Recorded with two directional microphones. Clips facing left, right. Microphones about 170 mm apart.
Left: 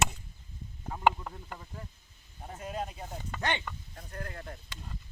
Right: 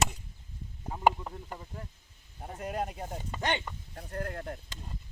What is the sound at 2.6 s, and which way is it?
Speech, 55° right (ahead or behind).